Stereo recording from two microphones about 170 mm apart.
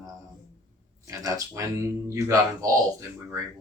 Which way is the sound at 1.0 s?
20° right (ahead or behind).